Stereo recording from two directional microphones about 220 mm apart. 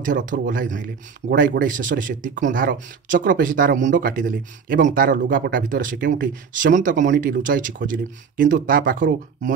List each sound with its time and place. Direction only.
0.0 s speech: 35° right (ahead or behind)